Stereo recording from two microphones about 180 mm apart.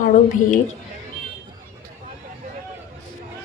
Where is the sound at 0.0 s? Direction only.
45° left (ahead or behind).